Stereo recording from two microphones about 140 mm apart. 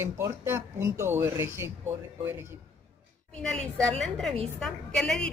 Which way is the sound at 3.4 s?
5° left (ahead or behind).